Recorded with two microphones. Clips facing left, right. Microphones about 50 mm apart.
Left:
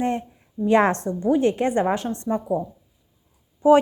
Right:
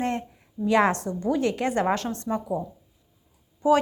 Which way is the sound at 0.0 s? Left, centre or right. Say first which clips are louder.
Left 3 dB; left.